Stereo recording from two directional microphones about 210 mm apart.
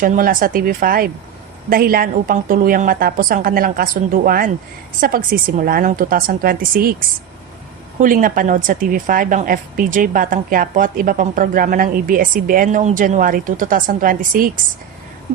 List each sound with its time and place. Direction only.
0.0 s a woman's voice: 40° right (ahead or behind)
7.9 s a woman's voice: 40° right (ahead or behind)